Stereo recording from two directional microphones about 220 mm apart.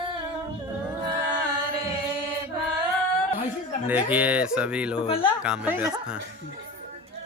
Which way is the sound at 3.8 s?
5° right (ahead or behind).